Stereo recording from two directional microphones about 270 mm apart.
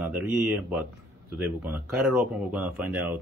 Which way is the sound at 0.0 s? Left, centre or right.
Centre.